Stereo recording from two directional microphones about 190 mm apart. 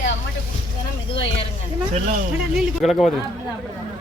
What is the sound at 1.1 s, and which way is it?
Speech, 30° left (ahead or behind).